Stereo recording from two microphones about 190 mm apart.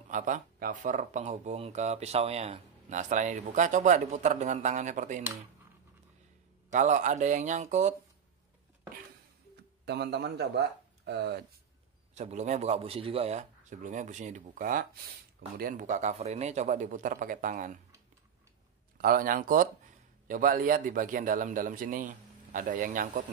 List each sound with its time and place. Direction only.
0.1 s speech: 40° right (ahead or behind)
6.7 s speech: 40° right (ahead or behind)
9.8 s a man's voice: 60° right (ahead or behind)
12.2 s speech: 35° right (ahead or behind)
18.9 s a man's voice: 50° right (ahead or behind)